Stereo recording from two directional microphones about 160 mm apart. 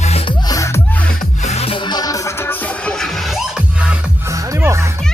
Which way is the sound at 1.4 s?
40° left (ahead or behind).